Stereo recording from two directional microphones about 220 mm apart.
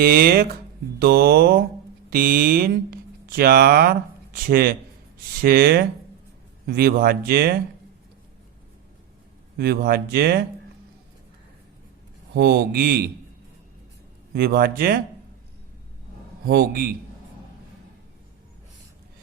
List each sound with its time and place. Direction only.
0.0 s speech: 45° right (ahead or behind)
9.6 s speech: 45° right (ahead or behind)
12.3 s speech: 45° right (ahead or behind)
14.3 s speech: 45° right (ahead or behind)
16.5 s speech: 45° right (ahead or behind)